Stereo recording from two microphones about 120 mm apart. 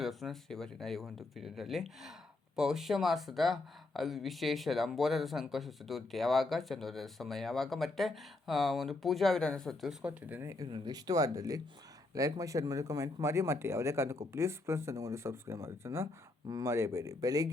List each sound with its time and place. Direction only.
0.0 s speech: centre (ahead or behind)
10.0 s speech: 10° right (ahead or behind)
10.7 s speech: 35° right (ahead or behind)